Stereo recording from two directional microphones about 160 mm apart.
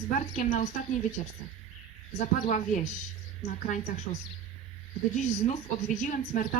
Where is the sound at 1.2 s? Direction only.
45° left (ahead or behind).